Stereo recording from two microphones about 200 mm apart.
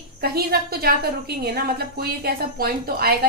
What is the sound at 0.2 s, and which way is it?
A woman's voice, 50° right (ahead or behind).